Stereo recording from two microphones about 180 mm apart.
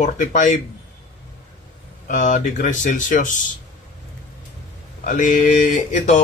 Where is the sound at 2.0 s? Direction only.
45° left (ahead or behind).